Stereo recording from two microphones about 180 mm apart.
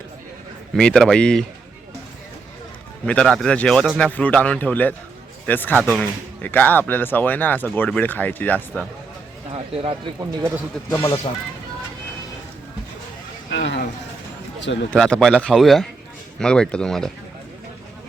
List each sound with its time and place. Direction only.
0.8 s a man's voice: 5° left (ahead or behind)
3.1 s a man's voice: 5° left (ahead or behind)
9.5 s speech: 30° right (ahead or behind)
10.8 s speech: 15° left (ahead or behind)
13.5 s a sound: 75° left (ahead or behind)
14.6 s a man's voice: 90° left
14.8 s a man's voice: 5° left (ahead or behind)